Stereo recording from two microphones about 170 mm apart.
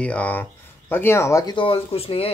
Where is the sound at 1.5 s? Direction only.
35° left (ahead or behind).